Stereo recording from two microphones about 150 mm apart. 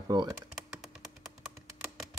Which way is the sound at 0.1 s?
30° right (ahead or behind).